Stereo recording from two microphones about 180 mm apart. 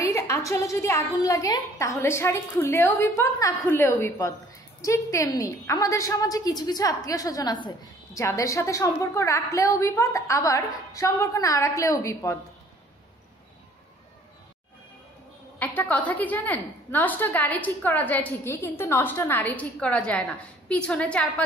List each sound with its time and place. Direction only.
0.0 s a woman's voice: 20° left (ahead or behind)
15.6 s a woman's voice: 10° left (ahead or behind)